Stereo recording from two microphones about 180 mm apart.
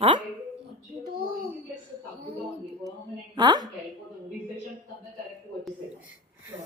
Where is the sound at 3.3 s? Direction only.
25° right (ahead or behind).